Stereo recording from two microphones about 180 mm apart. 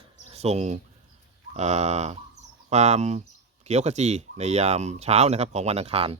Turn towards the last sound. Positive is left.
turn(degrees=-35)  # may be behind; listen again after turning